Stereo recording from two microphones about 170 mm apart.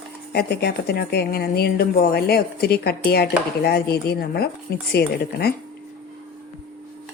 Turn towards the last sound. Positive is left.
turn(degrees=70)  # may be behind; listen again after turning